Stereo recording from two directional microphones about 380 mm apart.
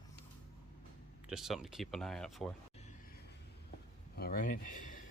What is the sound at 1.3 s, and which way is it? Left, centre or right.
Speech, centre.